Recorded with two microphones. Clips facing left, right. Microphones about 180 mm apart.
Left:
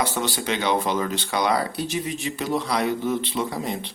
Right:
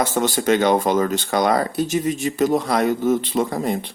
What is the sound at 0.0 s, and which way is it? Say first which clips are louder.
Speech: right 6 dB; 45° right (ahead or behind).